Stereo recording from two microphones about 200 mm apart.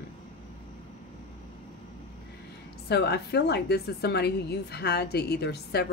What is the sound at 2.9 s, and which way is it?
A woman's voice, 55° left (ahead or behind).